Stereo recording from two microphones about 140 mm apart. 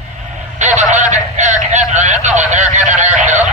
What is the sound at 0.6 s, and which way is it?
Vehicle, 60° right (ahead or behind).